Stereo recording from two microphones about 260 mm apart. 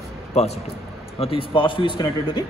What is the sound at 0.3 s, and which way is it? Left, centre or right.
A man's voice, left.